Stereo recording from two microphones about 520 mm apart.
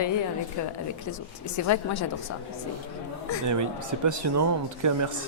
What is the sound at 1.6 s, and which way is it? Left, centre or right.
Speech, left.